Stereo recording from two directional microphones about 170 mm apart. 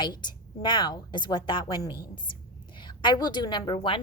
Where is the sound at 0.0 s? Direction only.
25° left (ahead or behind).